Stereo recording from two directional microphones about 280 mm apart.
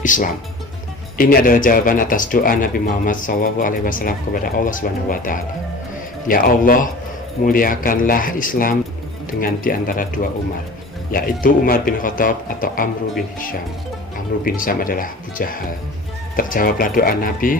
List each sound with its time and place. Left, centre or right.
0.0 s speech: left
11.1 s speech: left
14.4 s speech: left